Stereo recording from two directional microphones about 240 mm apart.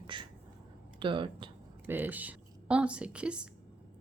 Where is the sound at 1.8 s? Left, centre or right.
Centre.